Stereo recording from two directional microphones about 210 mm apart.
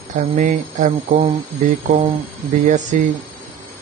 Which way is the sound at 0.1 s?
35° right (ahead or behind).